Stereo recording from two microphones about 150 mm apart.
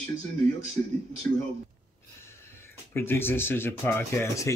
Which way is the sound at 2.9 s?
15° left (ahead or behind).